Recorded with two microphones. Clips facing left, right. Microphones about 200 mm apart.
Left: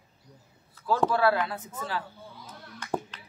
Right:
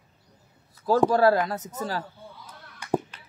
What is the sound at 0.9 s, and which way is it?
Speech, 40° right (ahead or behind).